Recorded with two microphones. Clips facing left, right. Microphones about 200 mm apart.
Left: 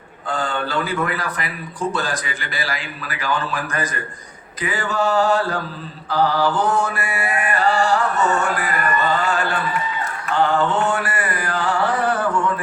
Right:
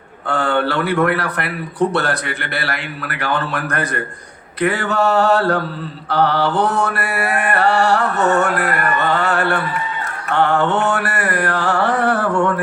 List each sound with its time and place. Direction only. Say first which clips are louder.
0.3 s speech: right 6 dB; 70° right (ahead or behind)
10.2 s mantra: right 2 dB; 70° right (ahead or behind)